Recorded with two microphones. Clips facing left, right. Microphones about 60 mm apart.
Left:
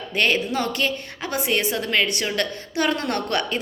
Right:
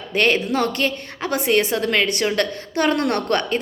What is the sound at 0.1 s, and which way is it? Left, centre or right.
A woman's voice, right.